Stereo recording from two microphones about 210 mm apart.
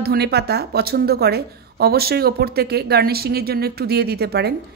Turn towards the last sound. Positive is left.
turn(degrees=-50)  # may be behind; listen again after turning